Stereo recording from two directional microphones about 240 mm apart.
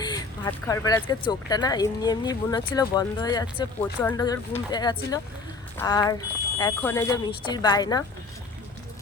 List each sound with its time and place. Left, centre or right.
0.0 s speech: centre